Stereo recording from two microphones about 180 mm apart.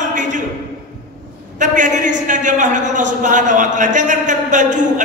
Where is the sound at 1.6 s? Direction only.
45° right (ahead or behind).